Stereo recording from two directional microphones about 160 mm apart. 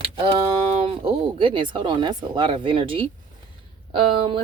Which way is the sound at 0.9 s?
35° right (ahead or behind).